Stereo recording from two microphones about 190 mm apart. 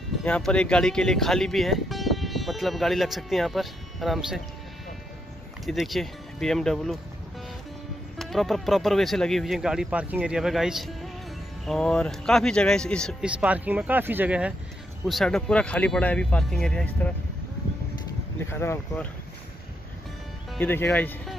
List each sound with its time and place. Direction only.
0.2 s speech: 5° left (ahead or behind)
5.7 s speech: centre (ahead or behind)
8.2 s speech: centre (ahead or behind)
13.2 s speech: 5° right (ahead or behind)
18.4 s speech: 15° left (ahead or behind)
20.5 s speech: 10° left (ahead or behind)